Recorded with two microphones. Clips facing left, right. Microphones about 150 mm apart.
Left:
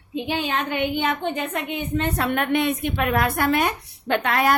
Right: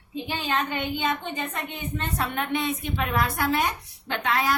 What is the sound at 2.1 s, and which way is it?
A woman's voice, 70° left (ahead or behind).